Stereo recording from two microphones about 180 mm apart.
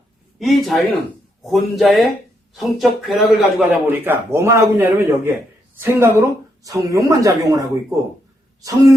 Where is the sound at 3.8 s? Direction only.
10° right (ahead or behind).